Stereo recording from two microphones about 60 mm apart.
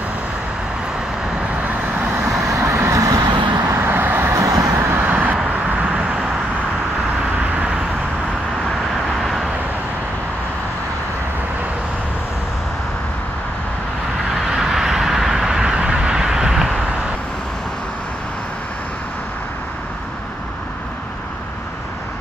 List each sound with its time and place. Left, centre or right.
2.6 s vehicle: right
3.7 s vehicle: right
4.4 s vehicle: right
4.9 s vehicle: right
5.4 s vehicle: centre
9.2 s vehicle: centre
14.5 s a sound: centre